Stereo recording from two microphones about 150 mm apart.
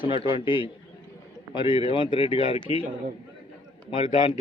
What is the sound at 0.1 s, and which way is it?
A man's voice, 35° left (ahead or behind).